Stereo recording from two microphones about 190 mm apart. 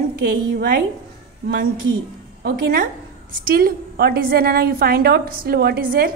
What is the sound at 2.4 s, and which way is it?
A woman's voice, 50° right (ahead or behind).